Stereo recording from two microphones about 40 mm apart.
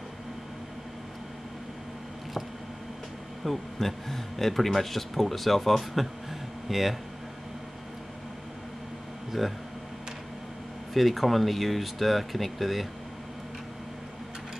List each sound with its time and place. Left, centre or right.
3.4 s a man's voice: centre
9.4 s a man's voice: centre
10.9 s a man's voice: centre